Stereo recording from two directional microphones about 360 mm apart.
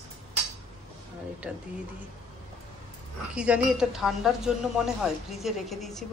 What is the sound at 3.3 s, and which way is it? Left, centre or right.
Speech, centre.